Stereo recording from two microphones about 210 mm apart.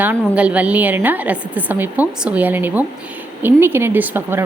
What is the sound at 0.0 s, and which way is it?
A woman's voice, 5° right (ahead or behind).